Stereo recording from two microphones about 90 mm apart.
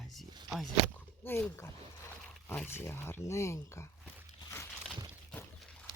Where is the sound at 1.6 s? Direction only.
30° left (ahead or behind).